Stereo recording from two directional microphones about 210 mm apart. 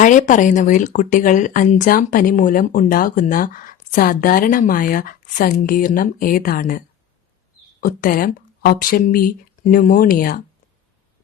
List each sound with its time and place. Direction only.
0.0 s speech: 35° left (ahead or behind)